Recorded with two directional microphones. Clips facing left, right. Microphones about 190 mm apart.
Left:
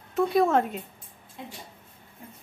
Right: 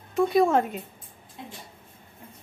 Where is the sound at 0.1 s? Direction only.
Centre (ahead or behind).